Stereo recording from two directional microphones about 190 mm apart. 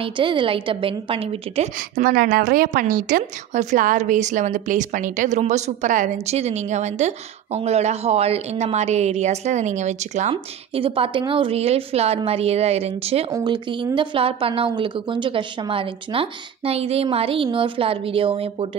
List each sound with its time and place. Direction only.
0.0 s speech: 25° right (ahead or behind)
1.8 s a woman's voice: 50° right (ahead or behind); by 18.7 s 30° right (ahead or behind)